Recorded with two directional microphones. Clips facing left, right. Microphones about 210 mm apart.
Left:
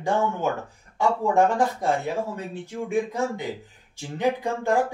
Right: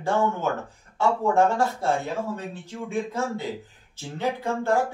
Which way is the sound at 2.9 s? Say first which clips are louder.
Left 2 dB; 15° left (ahead or behind).